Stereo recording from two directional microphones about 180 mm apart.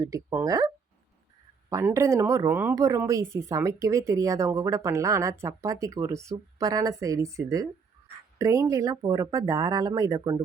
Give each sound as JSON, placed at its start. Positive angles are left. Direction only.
{"t": 0.0, "sound": "a woman's voice", "side_deg": -15}
{"t": 1.7, "sound": "a woman's voice", "side_deg": -15}